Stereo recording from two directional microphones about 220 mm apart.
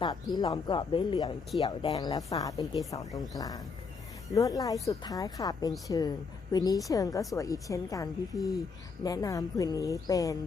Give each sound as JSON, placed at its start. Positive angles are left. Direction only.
{"t": 0.0, "sound": "speech", "side_deg": 20}